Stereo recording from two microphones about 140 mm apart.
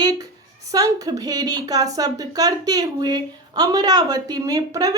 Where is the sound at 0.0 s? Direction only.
25° right (ahead or behind).